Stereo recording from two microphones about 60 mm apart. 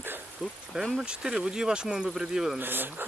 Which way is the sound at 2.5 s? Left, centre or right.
Right.